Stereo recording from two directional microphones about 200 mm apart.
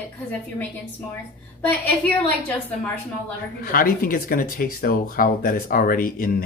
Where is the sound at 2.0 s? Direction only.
10° left (ahead or behind).